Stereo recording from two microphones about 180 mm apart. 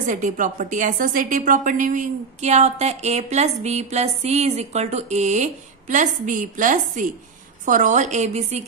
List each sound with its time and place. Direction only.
0.0 s a woman's voice: 45° right (ahead or behind)